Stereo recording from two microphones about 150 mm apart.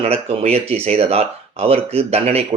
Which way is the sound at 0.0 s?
45° right (ahead or behind).